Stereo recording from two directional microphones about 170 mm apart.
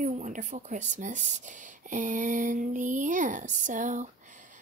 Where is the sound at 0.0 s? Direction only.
50° right (ahead or behind).